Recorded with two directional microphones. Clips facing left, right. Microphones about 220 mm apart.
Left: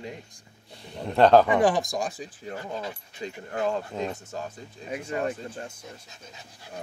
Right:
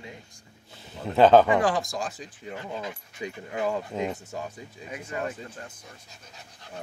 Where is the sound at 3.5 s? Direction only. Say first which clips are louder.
Left 1 dB; 10° right (ahead or behind).